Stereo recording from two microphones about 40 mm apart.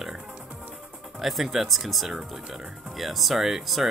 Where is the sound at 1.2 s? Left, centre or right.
Centre.